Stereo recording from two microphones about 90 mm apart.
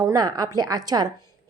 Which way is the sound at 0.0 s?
45° right (ahead or behind).